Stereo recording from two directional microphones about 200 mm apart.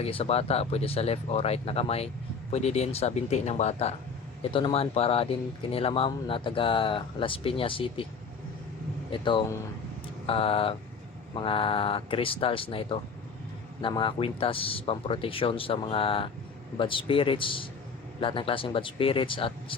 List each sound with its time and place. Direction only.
0.0 s speech: 30° left (ahead or behind)
9.1 s speech: 25° left (ahead or behind)